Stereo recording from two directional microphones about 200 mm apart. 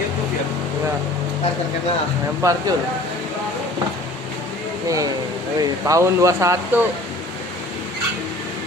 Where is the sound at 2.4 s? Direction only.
15° right (ahead or behind).